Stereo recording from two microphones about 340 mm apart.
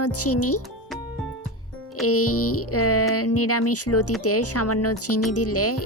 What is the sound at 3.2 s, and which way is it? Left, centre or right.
Music, left.